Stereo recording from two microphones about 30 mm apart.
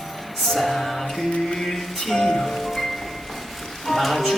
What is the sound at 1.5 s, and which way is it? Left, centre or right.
Music, centre.